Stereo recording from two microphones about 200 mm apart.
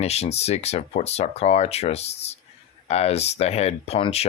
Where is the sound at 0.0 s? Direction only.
30° left (ahead or behind).